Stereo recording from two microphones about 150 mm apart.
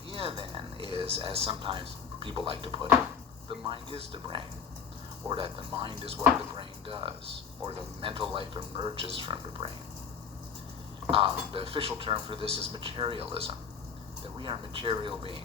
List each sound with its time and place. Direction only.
0.1 s a sound: 35° right (ahead or behind)
3.5 s a man's voice: 35° right (ahead or behind)
11.1 s a man's voice: 40° right (ahead or behind)